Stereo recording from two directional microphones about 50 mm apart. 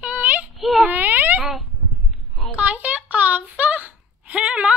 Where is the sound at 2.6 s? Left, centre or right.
Right.